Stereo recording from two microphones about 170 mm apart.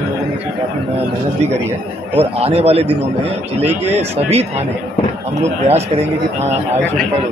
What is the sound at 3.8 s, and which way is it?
Speech, 35° right (ahead or behind).